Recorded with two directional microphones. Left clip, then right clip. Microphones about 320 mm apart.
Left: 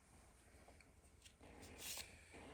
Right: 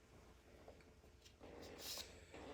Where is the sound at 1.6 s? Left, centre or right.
Left.